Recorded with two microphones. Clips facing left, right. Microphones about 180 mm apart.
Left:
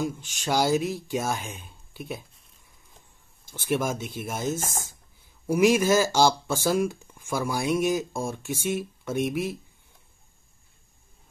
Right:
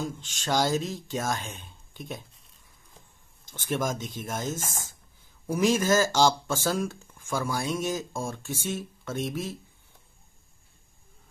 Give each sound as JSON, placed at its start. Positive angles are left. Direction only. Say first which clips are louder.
{"t": 0.0, "sound": "speech", "louder": "left 4 dB", "side_deg": 10}
{"t": 3.4, "sound": "speech", "louder": "left 3 dB", "side_deg": 10}
{"t": 4.6, "sound": "speech", "louder": "left 4 dB", "side_deg": 40}
{"t": 5.5, "sound": "speech", "louder": "left 3 dB", "side_deg": 10}